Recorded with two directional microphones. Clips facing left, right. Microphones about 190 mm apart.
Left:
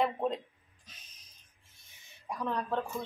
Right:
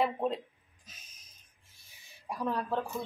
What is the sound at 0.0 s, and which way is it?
Speech, 5° right (ahead or behind).